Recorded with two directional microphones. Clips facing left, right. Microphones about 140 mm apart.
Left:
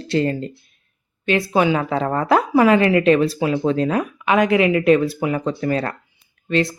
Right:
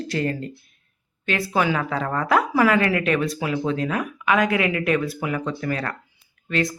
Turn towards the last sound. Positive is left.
turn(degrees=25)  # may be behind; listen again after turning